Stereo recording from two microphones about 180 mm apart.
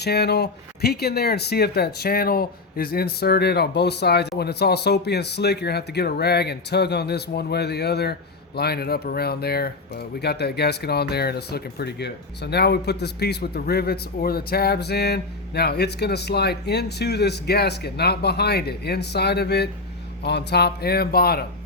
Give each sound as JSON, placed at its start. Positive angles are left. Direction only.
{"t": 0.0, "sound": "speech", "side_deg": 65}